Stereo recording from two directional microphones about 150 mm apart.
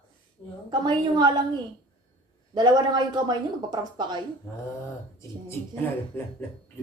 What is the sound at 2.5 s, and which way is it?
Speech, 30° right (ahead or behind).